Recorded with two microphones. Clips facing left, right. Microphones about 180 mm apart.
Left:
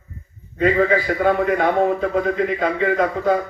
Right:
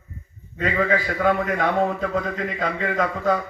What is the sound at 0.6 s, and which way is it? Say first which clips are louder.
A man's voice: left 5 dB; 35° left (ahead or behind).